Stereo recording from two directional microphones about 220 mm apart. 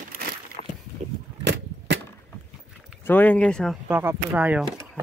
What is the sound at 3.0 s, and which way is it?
Speech, 10° left (ahead or behind).